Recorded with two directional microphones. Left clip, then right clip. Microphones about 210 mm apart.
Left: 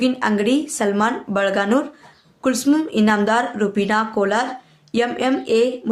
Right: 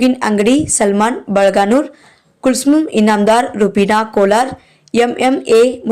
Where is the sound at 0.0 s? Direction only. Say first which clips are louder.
Right 6 dB; 35° right (ahead or behind).